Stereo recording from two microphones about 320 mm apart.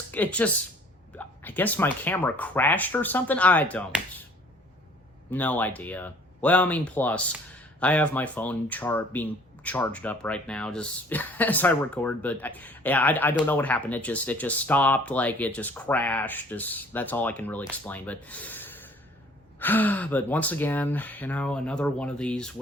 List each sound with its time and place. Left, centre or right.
0.1 s speech: centre
5.3 s speech: centre